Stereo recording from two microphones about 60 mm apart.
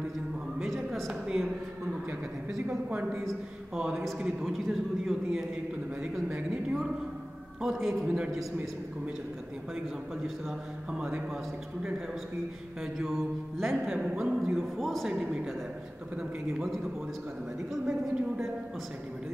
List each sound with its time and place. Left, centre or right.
0.6 s a sound: centre
1.2 s a man's voice: centre
2.9 s a woman's voice: right
3.7 s a man's voice: centre
6.2 s a man's voice: centre
7.6 s a man's voice: centre
13.0 s a man's voice: centre
14.6 s a man's voice: centre
16.2 s a man's voice: centre
17.8 s a man's voice: centre